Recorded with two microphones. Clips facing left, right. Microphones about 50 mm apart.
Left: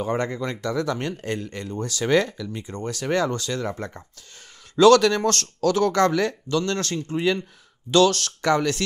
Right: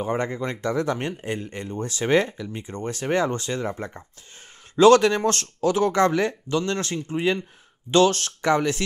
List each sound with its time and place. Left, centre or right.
0.1 s speech: centre
3.7 s speech: centre
4.7 s speech: right